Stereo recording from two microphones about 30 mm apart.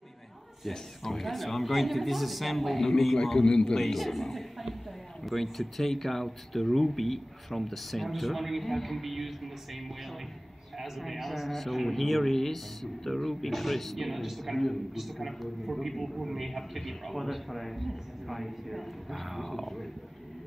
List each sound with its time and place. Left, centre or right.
0.7 s speech: centre
3.2 s a man's voice: centre
3.7 s a man's voice: centre